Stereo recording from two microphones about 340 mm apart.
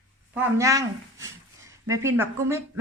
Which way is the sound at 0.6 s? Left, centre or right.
Centre.